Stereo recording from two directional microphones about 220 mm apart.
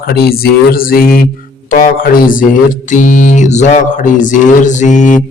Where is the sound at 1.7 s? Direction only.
40° left (ahead or behind).